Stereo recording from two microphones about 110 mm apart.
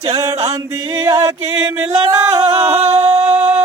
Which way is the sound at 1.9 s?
70° right (ahead or behind).